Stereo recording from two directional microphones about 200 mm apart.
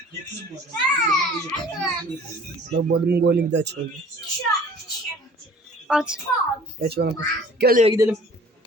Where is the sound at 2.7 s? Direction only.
55° right (ahead or behind).